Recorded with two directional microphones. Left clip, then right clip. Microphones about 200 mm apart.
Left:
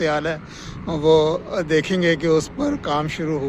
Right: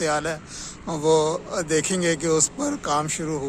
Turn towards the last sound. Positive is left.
turn(degrees=-5)  # may be behind; listen again after turning